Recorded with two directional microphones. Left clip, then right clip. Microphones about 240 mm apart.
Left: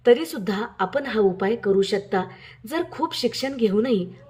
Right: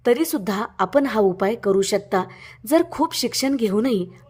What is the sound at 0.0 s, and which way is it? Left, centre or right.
A woman's voice, right.